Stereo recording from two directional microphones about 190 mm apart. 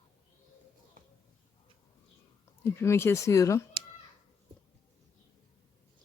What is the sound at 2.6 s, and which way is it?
Speech, 15° left (ahead or behind).